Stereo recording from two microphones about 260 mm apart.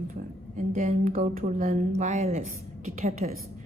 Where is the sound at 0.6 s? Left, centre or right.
Right.